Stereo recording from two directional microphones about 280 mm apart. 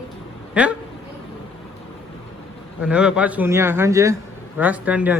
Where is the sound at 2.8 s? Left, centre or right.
Centre.